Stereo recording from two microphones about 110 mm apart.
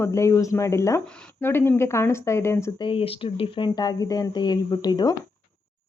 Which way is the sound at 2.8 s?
55° left (ahead or behind).